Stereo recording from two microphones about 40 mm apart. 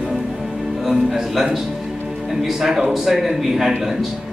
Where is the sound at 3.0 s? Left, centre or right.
Centre.